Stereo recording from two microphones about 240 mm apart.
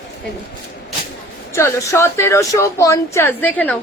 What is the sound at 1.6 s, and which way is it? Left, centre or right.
Speech, centre.